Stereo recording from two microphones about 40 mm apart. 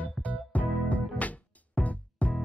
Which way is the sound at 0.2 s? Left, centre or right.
Left.